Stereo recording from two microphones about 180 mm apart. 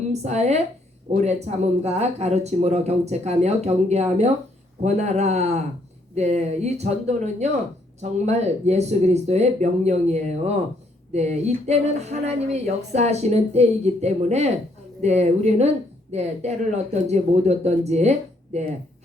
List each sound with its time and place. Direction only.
0.1 s speech: 40° right (ahead or behind)